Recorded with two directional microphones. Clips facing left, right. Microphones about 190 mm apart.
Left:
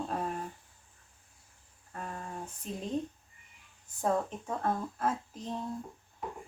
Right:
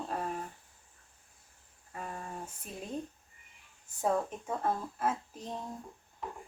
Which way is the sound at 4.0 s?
5° right (ahead or behind).